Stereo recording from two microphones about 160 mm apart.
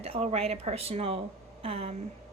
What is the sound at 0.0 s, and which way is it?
A woman's voice, 40° right (ahead or behind).